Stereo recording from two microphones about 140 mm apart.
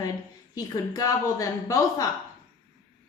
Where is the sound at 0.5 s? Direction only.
25° left (ahead or behind).